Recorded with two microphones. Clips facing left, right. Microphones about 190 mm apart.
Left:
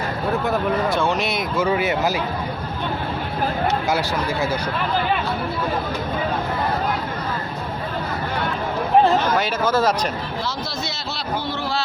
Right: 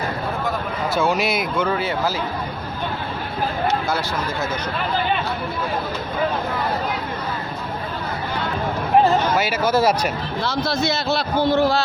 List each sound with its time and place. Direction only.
0.9 s speech: 5° right (ahead or behind)
1.6 s speech: 15° left (ahead or behind)
9.4 s speech: 10° right (ahead or behind)
10.4 s a man's voice: 55° right (ahead or behind)